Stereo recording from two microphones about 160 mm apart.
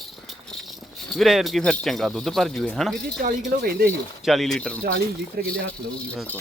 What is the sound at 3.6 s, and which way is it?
Speech, 75° right (ahead or behind).